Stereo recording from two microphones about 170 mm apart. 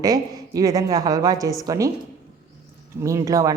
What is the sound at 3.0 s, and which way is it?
Speech, 20° right (ahead or behind).